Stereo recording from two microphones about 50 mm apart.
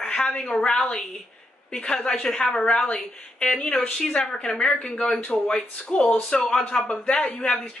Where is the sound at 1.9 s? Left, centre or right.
Centre.